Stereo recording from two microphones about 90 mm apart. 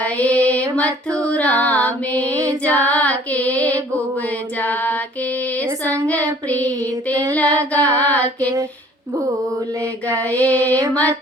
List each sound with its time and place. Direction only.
0.0 s music: 15° left (ahead or behind)
0.8 s female singing: 15° left (ahead or behind)
2.3 s female singing: 40° right (ahead or behind)
2.6 s female singing: 15° left (ahead or behind)
4.6 s a sound: 20° left (ahead or behind)
5.8 s female singing: 15° left (ahead or behind)
8.4 s female singing: 40° right (ahead or behind)
10.2 s a sound: 20° left (ahead or behind)